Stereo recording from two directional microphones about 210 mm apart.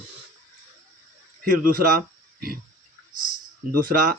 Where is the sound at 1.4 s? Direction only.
40° right (ahead or behind).